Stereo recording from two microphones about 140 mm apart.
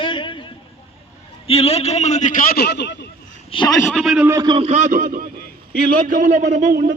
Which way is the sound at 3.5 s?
35° left (ahead or behind).